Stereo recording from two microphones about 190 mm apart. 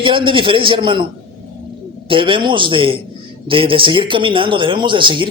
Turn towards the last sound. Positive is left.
turn(degrees=-25)  # may be behind; listen again after turning